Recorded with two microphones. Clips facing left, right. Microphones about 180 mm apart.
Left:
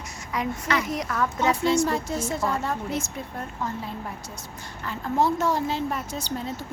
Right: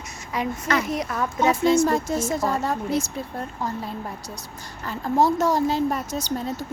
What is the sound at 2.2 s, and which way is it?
Speech, 40° right (ahead or behind).